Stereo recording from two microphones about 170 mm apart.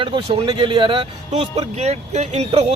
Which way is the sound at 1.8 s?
40° right (ahead or behind).